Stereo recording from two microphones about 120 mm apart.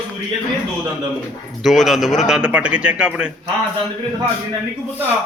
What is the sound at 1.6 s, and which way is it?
A man's voice, centre (ahead or behind).